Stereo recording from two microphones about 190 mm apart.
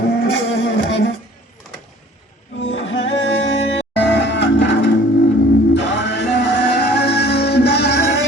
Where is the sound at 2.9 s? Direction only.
80° left.